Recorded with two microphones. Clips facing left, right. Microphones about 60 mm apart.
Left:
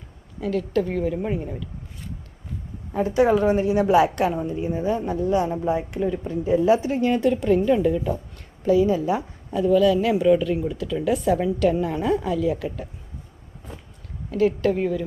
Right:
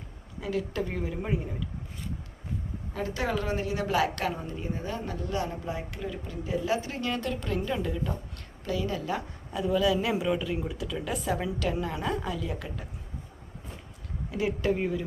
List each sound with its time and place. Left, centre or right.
0.4 s a woman's voice: centre
2.9 s speech: left
4.3 s speech: centre
7.2 s a woman's voice: centre
9.5 s a woman's voice: centre
14.3 s a woman's voice: centre